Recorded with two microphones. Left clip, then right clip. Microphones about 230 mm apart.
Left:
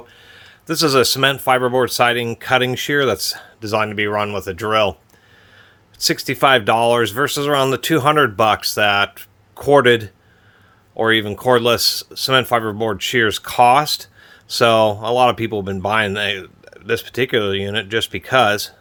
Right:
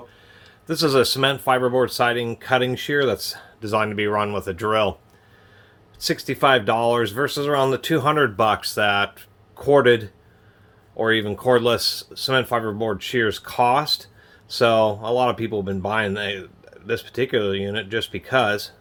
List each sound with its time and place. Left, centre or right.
0.3 s speech: left
6.0 s speech: left